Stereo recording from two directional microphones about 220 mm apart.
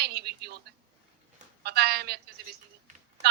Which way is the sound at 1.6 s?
45° right (ahead or behind).